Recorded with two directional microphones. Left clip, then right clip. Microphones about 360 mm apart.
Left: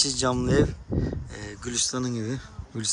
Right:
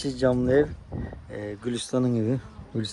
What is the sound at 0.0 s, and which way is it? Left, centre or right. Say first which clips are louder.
Speech: right 1 dB; centre.